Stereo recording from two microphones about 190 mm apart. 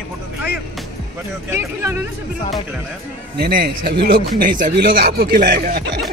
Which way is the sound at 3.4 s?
50° right (ahead or behind).